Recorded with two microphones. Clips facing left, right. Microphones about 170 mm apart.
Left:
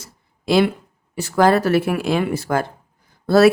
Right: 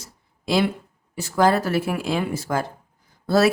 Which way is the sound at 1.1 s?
65° left (ahead or behind).